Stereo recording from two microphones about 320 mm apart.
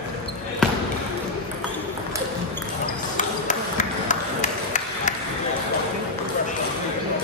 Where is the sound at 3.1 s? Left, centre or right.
Left.